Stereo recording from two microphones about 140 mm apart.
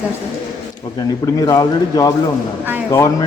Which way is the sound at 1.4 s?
25° left (ahead or behind).